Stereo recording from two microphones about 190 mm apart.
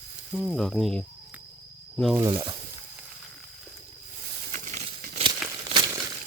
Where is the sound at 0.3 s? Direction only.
Centre (ahead or behind).